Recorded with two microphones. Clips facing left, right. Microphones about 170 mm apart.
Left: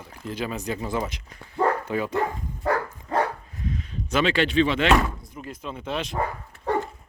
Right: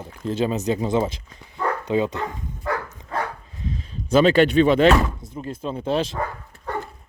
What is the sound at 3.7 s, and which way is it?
Speech, 30° right (ahead or behind).